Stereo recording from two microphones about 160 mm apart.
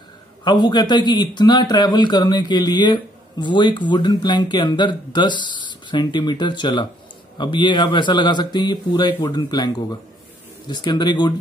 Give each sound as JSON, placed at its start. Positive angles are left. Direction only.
{"t": 0.4, "sound": "a man's voice", "side_deg": 30}